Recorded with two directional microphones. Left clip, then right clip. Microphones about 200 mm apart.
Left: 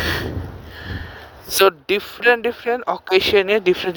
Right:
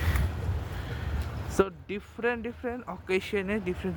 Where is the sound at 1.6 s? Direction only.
55° left (ahead or behind).